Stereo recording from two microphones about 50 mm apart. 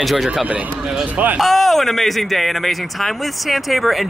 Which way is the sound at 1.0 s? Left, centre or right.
Right.